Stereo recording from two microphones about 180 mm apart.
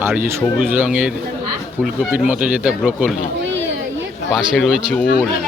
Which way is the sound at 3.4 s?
90° right.